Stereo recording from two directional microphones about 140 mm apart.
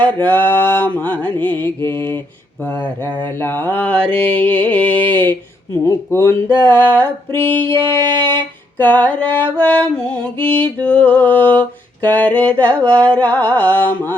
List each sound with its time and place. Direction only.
0.0 s female singing: 10° left (ahead or behind)